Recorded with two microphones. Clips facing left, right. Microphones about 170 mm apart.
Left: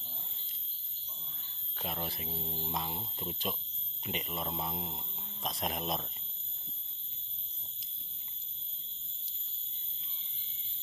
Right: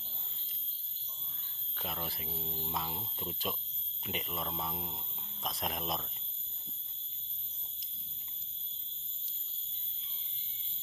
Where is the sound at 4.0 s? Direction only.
Centre (ahead or behind).